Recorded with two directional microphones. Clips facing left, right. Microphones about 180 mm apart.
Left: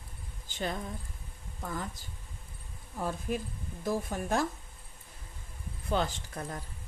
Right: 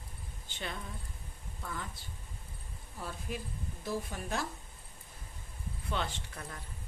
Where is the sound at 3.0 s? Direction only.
45° left (ahead or behind).